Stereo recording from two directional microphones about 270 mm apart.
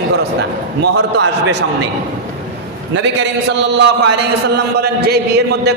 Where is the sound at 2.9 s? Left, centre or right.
Right.